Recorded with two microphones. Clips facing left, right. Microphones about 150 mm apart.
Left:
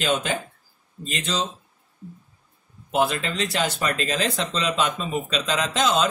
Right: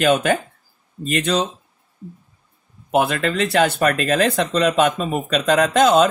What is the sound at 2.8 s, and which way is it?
Speech, 60° right (ahead or behind).